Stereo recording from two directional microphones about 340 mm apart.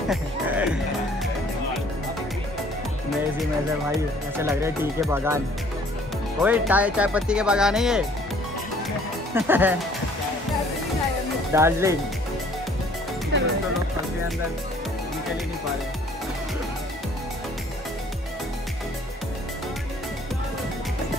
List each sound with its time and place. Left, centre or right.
0.1 s music: centre
4.4 s speech: centre
6.4 s speech: centre
9.3 s speech: centre
11.5 s speech: centre
13.3 s speech: right